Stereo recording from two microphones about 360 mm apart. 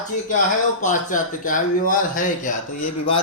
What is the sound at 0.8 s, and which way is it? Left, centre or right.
Speech, left.